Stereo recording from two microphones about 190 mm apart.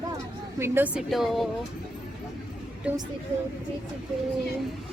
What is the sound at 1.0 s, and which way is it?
Speech, centre (ahead or behind).